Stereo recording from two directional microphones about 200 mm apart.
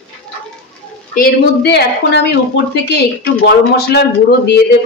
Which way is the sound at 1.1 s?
50° left (ahead or behind).